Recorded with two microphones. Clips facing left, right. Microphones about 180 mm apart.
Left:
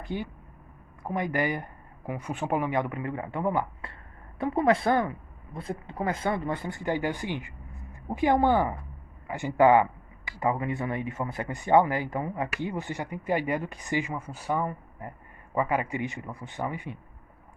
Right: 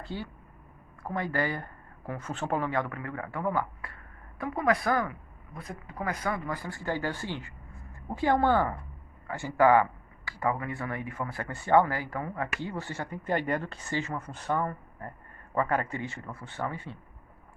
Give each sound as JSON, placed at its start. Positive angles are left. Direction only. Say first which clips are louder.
{"t": 0.0, "sound": "speech", "louder": "left 4 dB", "side_deg": 15}